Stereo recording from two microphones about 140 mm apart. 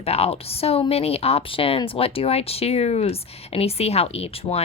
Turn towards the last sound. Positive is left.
turn(degrees=45)  # may be behind; listen again after turning